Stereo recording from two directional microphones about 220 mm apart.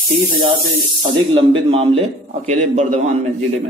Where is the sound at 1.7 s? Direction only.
25° right (ahead or behind).